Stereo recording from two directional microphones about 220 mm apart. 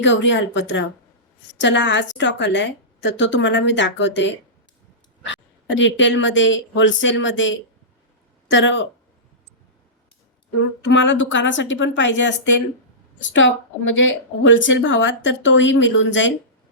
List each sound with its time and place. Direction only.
0.0 s a woman's voice: 55° left (ahead or behind)
10.8 s a woman's voice: 55° left (ahead or behind)
13.3 s a woman's voice: 60° left (ahead or behind)